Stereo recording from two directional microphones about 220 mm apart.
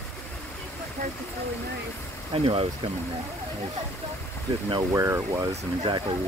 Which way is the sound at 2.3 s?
25° right (ahead or behind).